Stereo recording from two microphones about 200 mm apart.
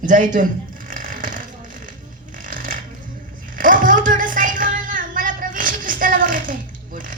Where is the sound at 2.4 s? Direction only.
40° right (ahead or behind).